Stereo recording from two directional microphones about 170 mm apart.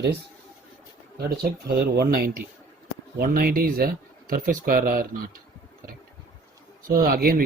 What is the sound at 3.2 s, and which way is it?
Speech, 60° right (ahead or behind).